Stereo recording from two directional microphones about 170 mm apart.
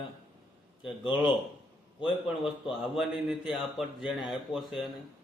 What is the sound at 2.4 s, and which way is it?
A man's voice, centre (ahead or behind).